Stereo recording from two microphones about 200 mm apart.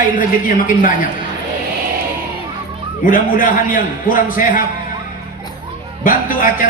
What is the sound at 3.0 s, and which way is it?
A man's voice, 45° left (ahead or behind).